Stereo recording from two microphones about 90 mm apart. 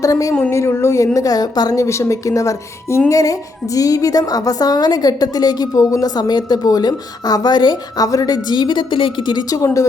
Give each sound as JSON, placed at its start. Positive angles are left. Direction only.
{"t": 0.0, "sound": "a woman's voice", "side_deg": 40}
{"t": 8.0, "sound": "a woman's voice", "side_deg": 45}